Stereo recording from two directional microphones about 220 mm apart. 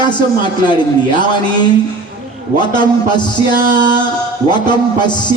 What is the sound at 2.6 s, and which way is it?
Speech, 20° left (ahead or behind).